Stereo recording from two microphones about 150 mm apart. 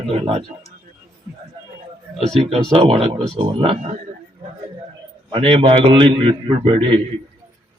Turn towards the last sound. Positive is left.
turn(degrees=-35)  # may be behind; listen again after turning